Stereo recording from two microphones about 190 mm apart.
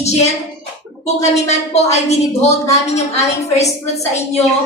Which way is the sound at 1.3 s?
35° left (ahead or behind).